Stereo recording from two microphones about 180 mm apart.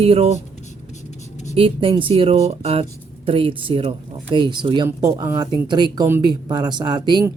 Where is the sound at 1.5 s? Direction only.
30° right (ahead or behind).